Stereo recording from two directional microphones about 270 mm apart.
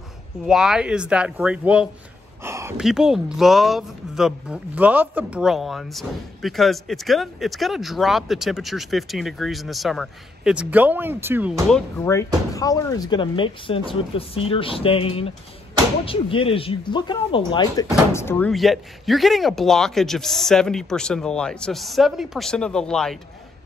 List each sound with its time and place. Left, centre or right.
0.5 s speech: centre
12.0 s speech: centre